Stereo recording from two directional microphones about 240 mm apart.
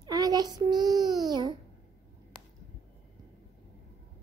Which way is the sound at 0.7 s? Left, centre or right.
Centre.